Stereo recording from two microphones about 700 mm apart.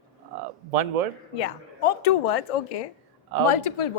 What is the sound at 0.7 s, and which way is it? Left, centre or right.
Speech, right.